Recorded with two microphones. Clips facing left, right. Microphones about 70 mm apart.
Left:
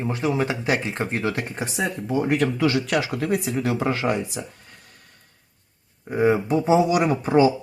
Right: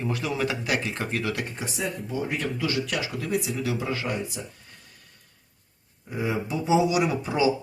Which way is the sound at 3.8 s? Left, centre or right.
Left.